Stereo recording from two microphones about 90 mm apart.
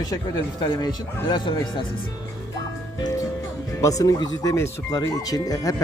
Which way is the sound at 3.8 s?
40° left (ahead or behind).